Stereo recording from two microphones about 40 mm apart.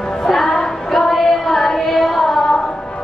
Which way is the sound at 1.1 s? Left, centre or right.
Centre.